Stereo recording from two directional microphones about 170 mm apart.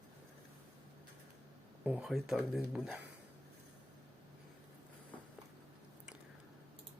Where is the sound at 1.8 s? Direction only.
5° right (ahead or behind).